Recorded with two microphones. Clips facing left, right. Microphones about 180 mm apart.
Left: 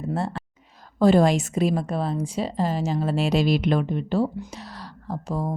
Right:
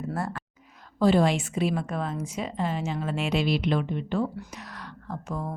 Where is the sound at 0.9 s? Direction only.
45° left (ahead or behind).